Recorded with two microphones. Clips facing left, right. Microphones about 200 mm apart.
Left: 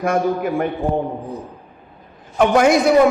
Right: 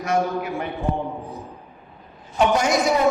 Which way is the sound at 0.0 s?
50° left (ahead or behind).